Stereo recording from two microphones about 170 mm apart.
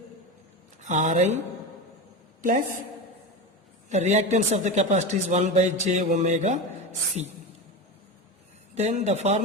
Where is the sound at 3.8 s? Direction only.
45° right (ahead or behind).